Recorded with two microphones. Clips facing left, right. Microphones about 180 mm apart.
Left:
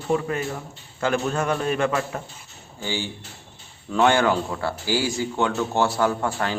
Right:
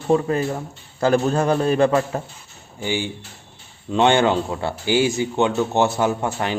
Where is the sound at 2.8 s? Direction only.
15° right (ahead or behind).